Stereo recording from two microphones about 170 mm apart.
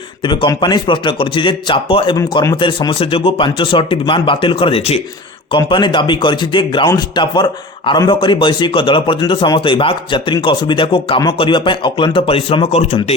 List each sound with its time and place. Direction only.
0.3 s speech: 25° left (ahead or behind)
2.1 s speech: 20° left (ahead or behind); by 13.1 s 40° left (ahead or behind)